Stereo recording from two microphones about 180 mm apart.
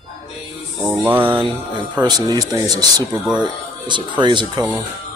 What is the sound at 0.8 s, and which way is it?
Mantra, 10° right (ahead or behind).